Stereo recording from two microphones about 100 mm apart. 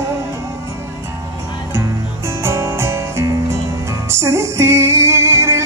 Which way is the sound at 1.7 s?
25° right (ahead or behind).